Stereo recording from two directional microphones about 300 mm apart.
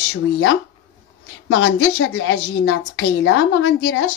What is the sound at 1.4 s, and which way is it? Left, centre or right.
A woman's voice, left.